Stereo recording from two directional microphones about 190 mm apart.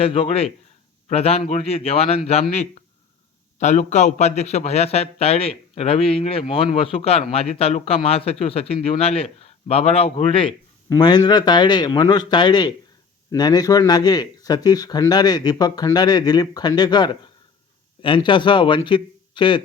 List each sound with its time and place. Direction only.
0.0 s a man's voice: 30° left (ahead or behind)